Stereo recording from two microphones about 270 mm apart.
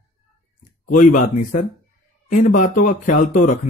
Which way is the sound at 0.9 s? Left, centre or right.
Left.